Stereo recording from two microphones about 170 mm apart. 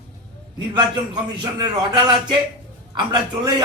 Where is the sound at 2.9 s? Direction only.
25° right (ahead or behind).